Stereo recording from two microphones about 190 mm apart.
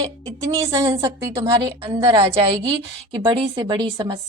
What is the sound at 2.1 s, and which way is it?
A woman's voice, 30° right (ahead or behind).